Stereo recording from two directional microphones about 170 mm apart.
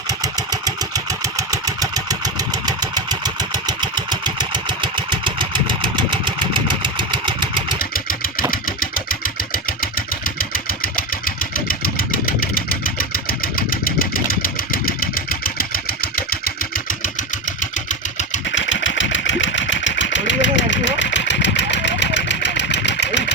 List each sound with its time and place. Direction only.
0.1 s engine: 20° right (ahead or behind)
7.8 s vehicle: 55° left (ahead or behind)
18.4 s sewing machine: 90° left